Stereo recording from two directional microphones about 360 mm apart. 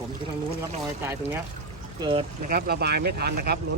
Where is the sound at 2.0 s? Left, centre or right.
Centre.